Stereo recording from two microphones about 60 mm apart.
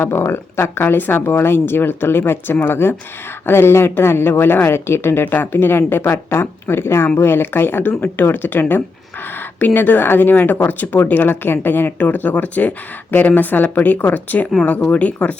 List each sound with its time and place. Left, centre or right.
0.0 s speech: left